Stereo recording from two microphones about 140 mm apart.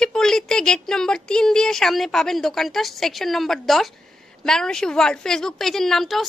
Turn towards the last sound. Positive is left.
turn(degrees=0)  # may be behind; listen again after turning